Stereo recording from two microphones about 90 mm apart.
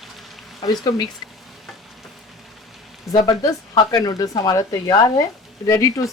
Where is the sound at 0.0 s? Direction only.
Centre (ahead or behind).